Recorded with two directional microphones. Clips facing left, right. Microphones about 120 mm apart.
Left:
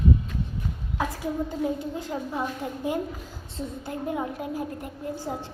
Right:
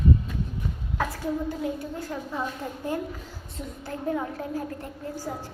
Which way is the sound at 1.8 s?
20° left (ahead or behind).